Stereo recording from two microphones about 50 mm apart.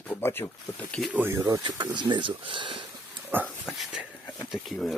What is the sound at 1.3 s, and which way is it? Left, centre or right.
Speech, right.